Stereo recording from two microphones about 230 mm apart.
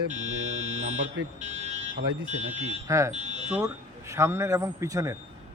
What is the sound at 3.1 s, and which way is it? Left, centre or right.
Speech, right.